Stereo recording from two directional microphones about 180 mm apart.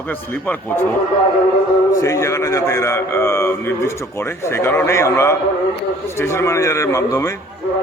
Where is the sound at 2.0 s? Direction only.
15° left (ahead or behind).